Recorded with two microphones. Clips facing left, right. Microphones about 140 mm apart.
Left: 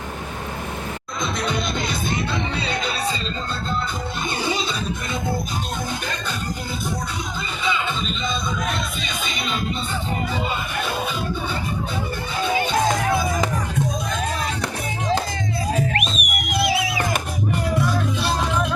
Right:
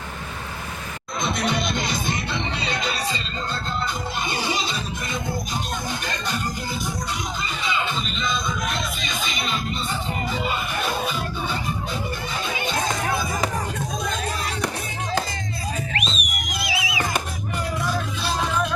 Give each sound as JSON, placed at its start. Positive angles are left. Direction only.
{"t": 15.7, "sound": "music", "side_deg": 55}